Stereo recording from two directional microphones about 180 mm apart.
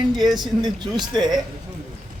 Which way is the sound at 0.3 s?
25° right (ahead or behind).